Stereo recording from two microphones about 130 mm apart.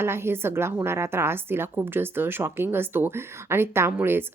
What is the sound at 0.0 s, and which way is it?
A woman's voice, 20° right (ahead or behind).